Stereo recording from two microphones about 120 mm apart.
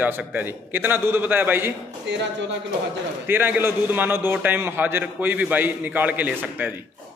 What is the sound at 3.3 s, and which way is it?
A man's voice, 15° right (ahead or behind).